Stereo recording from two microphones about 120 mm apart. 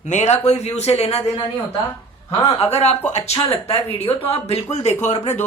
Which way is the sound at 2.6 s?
60° left (ahead or behind).